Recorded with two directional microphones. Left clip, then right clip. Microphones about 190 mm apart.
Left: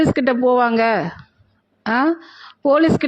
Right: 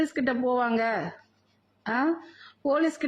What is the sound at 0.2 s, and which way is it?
Speech, 25° left (ahead or behind).